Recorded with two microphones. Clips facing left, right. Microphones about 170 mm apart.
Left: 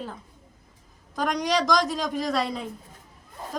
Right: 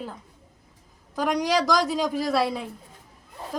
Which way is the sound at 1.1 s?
5° right (ahead or behind).